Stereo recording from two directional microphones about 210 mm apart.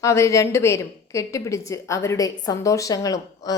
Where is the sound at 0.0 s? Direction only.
15° left (ahead or behind).